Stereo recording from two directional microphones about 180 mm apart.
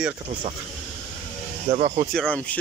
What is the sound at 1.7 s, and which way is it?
Speech, 40° right (ahead or behind).